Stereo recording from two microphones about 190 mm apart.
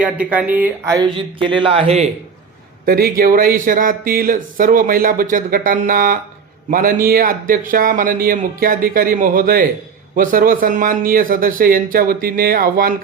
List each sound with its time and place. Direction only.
0.0 s speech: 5° right (ahead or behind); by 2.0 s 30° right (ahead or behind)
2.8 s speech: 50° right (ahead or behind)